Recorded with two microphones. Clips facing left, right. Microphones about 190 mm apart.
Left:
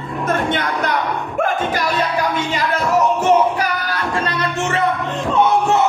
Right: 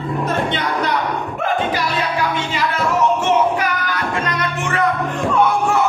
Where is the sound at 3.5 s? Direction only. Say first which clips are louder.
Even; 35° left (ahead or behind).